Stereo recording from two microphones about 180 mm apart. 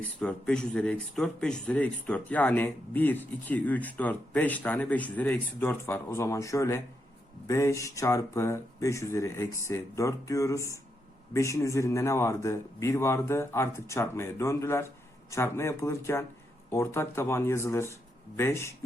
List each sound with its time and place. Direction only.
0.0 s speech: 5° left (ahead or behind)